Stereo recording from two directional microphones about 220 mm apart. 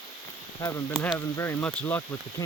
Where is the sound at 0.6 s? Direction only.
15° left (ahead or behind).